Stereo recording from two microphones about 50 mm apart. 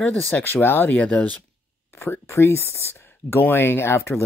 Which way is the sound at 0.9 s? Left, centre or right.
Left.